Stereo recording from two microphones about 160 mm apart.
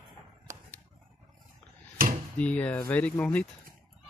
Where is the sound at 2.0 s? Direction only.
60° right (ahead or behind).